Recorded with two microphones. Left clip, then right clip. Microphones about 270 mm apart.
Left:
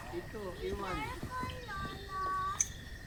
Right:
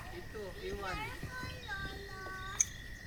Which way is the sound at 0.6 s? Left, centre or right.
Left.